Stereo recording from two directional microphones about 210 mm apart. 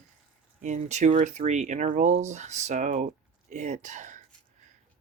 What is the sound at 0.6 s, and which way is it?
Speech, 35° right (ahead or behind).